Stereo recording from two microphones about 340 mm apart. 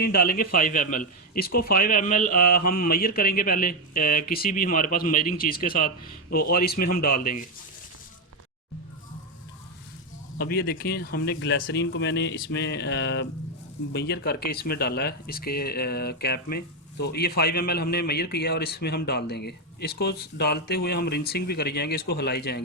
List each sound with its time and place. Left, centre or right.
0.0 s speech: left
10.3 s speech: left